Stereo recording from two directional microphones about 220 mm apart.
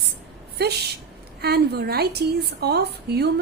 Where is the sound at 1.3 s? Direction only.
45° right (ahead or behind).